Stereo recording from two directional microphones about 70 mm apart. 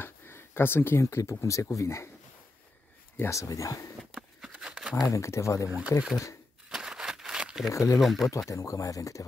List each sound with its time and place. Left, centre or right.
0.0 s speech: left
3.2 s speech: left
4.4 s a sound: centre
5.0 s speech: left
5.7 s speech: centre
6.7 s a sound: centre
7.7 s speech: left
8.0 s speech: centre
8.5 s speech: left